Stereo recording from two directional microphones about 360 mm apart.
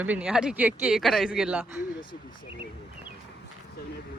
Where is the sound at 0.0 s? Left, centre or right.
Centre.